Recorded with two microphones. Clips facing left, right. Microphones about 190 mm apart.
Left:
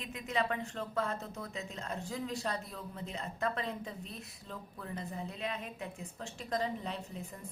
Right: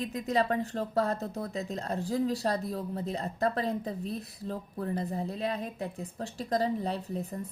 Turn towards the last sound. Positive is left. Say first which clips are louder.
# right 8 dB
turn(degrees=-35)  # may be behind; listen again after turning